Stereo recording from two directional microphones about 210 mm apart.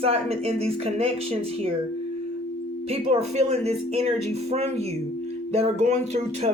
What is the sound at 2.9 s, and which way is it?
Speech, 30° right (ahead or behind).